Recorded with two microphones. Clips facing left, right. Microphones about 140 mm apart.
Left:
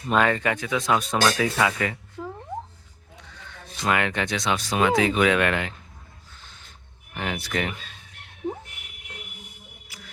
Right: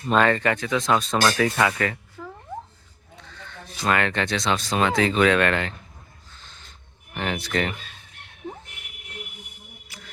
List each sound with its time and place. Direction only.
0.1 s speech: 10° left (ahead or behind)
2.2 s a sound: 25° left (ahead or behind)
3.2 s music: 15° left (ahead or behind)
3.8 s speech: 10° left (ahead or behind)
7.1 s speech: 10° left (ahead or behind)
9.9 s music: 10° left (ahead or behind)